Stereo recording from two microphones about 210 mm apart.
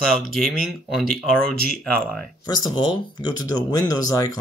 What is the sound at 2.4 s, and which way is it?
Speech, 20° left (ahead or behind).